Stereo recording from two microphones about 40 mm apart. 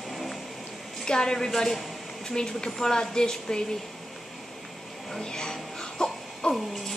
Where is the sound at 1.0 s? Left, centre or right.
Centre.